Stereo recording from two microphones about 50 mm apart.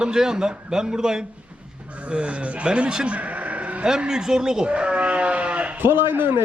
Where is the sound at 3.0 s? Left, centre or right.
Right.